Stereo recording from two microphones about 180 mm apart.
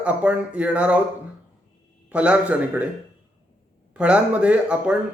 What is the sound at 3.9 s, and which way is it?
Speech, 5° right (ahead or behind).